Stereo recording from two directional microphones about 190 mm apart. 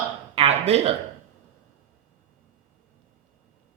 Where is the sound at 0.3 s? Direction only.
35° right (ahead or behind).